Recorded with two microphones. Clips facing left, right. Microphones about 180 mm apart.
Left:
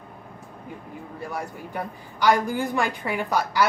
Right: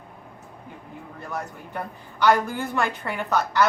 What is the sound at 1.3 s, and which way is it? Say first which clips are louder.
A woman's voice: right 1 dB; 10° left (ahead or behind).